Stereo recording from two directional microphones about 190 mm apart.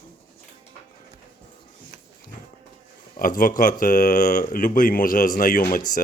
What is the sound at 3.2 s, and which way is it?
Speech, 45° left (ahead or behind).